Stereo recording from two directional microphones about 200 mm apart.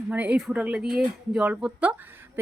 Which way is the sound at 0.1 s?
5° right (ahead or behind).